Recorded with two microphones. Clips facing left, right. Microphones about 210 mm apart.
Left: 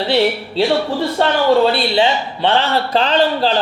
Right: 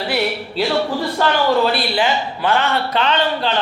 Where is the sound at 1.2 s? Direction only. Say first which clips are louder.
Left 3 dB; 25° left (ahead or behind).